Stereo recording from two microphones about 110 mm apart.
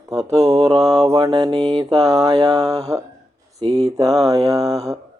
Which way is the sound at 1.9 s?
35° right (ahead or behind).